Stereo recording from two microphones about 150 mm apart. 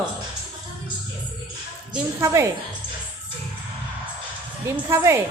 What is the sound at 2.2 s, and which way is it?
Speech, 20° right (ahead or behind).